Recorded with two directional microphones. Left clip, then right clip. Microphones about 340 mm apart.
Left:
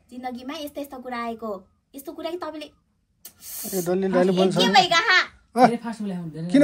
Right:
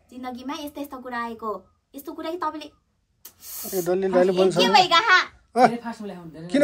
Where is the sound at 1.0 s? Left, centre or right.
Right.